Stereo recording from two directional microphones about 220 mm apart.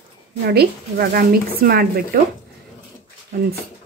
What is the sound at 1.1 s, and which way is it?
Speech, 45° right (ahead or behind).